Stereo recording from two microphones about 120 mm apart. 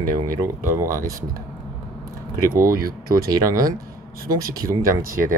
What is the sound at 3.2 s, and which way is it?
Speech, 30° right (ahead or behind).